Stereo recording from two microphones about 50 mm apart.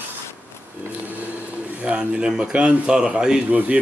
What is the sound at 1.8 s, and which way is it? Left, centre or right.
A man's voice, right.